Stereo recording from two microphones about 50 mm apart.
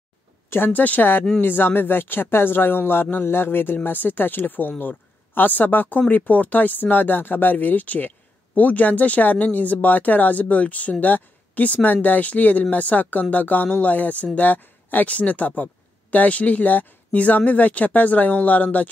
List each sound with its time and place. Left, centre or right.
0.7 s speech: left